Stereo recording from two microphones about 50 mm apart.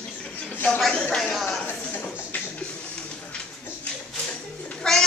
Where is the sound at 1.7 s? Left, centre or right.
Left.